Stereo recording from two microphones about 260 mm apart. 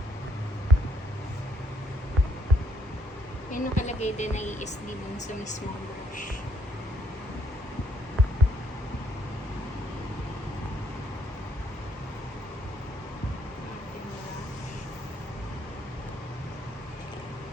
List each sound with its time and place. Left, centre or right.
3.5 s speech: left